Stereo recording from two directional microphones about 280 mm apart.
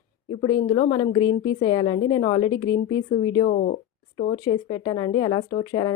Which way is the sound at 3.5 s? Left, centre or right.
Left.